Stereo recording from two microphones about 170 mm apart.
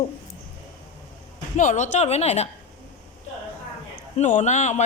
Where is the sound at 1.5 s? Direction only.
45° left (ahead or behind).